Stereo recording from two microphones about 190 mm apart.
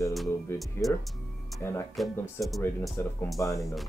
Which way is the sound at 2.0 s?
Centre (ahead or behind).